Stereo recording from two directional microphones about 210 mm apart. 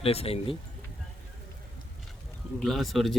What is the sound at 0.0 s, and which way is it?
Speech, 30° left (ahead or behind).